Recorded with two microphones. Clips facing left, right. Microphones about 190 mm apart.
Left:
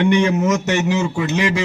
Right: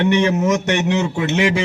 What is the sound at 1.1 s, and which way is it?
Speech, 20° right (ahead or behind).